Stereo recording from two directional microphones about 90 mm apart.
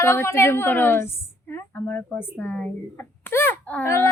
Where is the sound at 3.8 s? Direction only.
30° left (ahead or behind).